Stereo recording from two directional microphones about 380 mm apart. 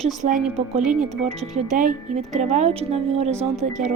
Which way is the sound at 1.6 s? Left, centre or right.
Right.